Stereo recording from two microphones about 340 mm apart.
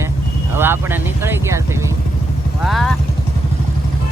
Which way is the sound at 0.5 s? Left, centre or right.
Centre.